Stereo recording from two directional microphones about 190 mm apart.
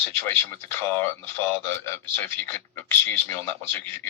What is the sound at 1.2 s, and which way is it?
A man's voice, 10° left (ahead or behind).